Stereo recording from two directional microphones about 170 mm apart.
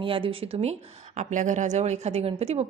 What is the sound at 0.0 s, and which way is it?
Speech, 30° right (ahead or behind).